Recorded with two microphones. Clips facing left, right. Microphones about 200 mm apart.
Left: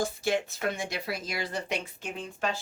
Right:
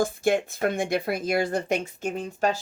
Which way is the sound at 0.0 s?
50° right (ahead or behind).